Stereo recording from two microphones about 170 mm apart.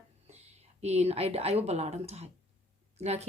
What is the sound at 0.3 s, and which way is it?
A woman's voice, 40° right (ahead or behind).